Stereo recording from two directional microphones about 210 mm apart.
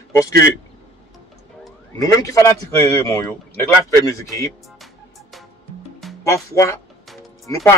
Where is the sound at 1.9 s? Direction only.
15° left (ahead or behind).